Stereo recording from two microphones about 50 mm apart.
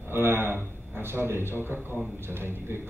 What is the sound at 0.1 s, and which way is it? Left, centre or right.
A man's voice, right.